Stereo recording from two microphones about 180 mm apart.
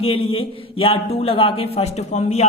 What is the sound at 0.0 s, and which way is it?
A man's voice, 30° left (ahead or behind).